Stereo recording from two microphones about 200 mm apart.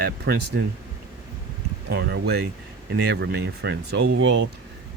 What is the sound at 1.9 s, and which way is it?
Speech, 55° right (ahead or behind).